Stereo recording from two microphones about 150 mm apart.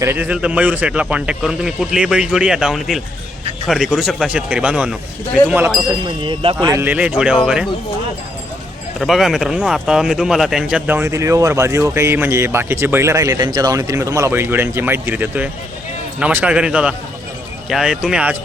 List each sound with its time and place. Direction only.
0.0 s speech: 15° right (ahead or behind)
6.2 s speech: 35° right (ahead or behind)
6.7 s speech: 15° right (ahead or behind)
9.0 s speech: centre (ahead or behind)